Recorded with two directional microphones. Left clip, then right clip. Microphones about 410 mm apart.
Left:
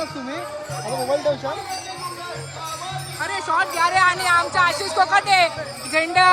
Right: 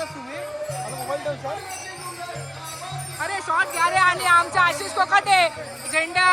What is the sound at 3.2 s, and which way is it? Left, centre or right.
Speech, centre.